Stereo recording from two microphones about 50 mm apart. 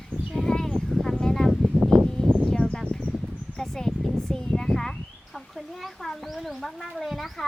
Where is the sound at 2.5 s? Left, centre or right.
Centre.